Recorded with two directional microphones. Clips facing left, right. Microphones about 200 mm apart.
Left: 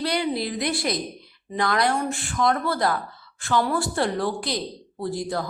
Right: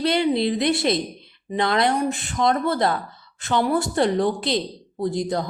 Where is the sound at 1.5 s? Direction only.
25° right (ahead or behind).